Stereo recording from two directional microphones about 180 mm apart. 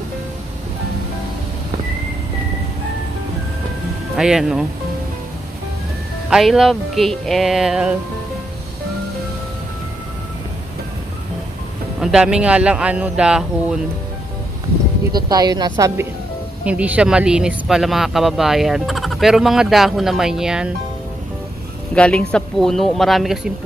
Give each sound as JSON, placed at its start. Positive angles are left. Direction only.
{"t": 4.2, "sound": "speech", "side_deg": -5}
{"t": 6.3, "sound": "speech", "side_deg": 0}
{"t": 12.0, "sound": "speech", "side_deg": -5}
{"t": 15.1, "sound": "a woman's voice", "side_deg": -20}
{"t": 16.6, "sound": "speech", "side_deg": -5}
{"t": 21.9, "sound": "speech", "side_deg": 5}